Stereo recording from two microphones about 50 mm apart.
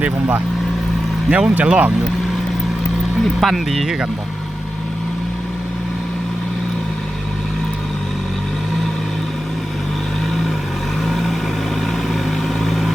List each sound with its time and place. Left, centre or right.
0.0 s speech: right
1.3 s speech: right
3.4 s speech: centre
11.0 s vehicle: centre
12.5 s vehicle: centre